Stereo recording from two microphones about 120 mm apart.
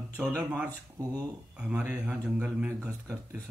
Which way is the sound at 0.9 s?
30° right (ahead or behind).